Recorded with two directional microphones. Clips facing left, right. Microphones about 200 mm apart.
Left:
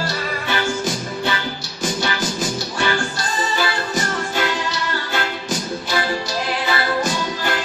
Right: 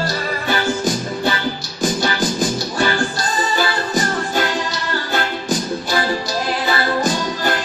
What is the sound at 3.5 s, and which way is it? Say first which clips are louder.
Music: right 3 dB; 40° right (ahead or behind).